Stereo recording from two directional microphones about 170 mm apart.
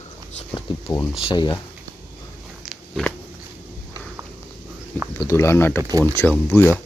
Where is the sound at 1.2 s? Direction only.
25° left (ahead or behind).